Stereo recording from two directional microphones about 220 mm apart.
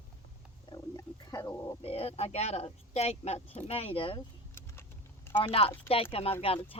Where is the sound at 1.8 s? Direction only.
25° left (ahead or behind).